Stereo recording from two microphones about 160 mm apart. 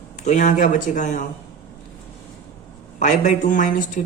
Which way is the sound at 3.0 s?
50° left (ahead or behind).